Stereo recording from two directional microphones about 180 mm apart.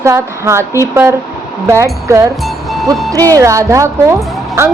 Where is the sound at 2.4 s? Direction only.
Centre (ahead or behind).